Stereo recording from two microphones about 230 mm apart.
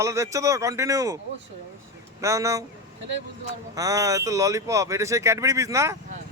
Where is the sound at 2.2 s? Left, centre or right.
Centre.